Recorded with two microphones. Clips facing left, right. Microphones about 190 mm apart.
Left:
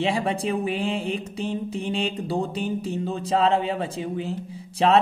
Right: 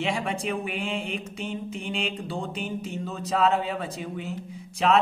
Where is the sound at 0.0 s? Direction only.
35° left (ahead or behind).